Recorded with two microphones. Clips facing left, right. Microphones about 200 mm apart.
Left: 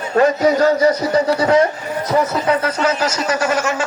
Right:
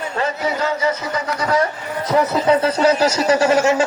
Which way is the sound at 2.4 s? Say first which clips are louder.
Right 3 dB; 30° right (ahead or behind).